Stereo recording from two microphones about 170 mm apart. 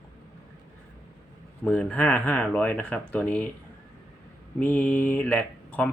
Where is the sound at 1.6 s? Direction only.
5° left (ahead or behind).